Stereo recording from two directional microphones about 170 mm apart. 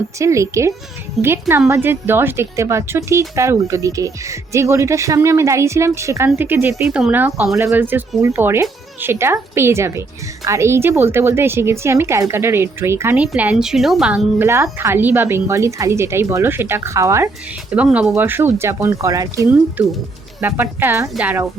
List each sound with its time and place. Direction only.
0.2 s a woman's voice: 15° right (ahead or behind)
17.7 s a woman's voice: 5° right (ahead or behind)
19.5 s a woman's voice: 10° right (ahead or behind)